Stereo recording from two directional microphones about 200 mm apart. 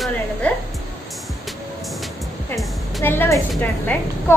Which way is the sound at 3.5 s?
10° left (ahead or behind).